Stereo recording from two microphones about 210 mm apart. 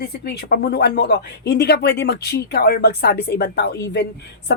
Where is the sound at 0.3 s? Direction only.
45° left (ahead or behind).